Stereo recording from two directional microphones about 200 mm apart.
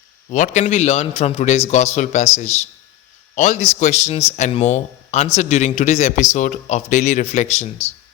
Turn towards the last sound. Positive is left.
turn(degrees=35)  # may be behind; listen again after turning